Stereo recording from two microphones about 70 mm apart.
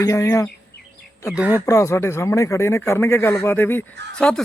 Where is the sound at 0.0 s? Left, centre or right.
Left.